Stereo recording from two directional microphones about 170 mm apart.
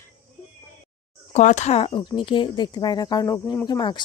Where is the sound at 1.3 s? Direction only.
45° left (ahead or behind).